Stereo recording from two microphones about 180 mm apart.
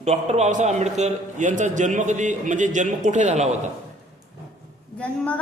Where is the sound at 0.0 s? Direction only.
35° right (ahead or behind).